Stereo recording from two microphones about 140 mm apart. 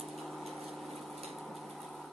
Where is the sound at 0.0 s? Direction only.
Centre (ahead or behind).